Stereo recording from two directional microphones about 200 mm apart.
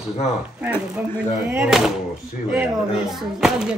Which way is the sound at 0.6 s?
5° right (ahead or behind).